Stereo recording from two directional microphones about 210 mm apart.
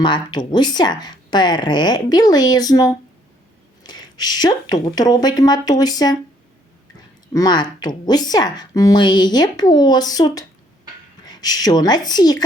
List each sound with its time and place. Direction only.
0.0 s speech: 20° left (ahead or behind)
7.3 s speech: 20° left (ahead or behind)